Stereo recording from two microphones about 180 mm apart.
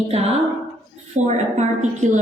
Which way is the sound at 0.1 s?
35° right (ahead or behind).